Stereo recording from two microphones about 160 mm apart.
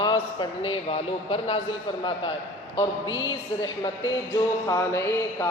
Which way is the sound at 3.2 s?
25° left (ahead or behind).